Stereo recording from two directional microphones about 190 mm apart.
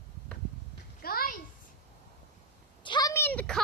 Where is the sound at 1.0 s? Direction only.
50° left (ahead or behind).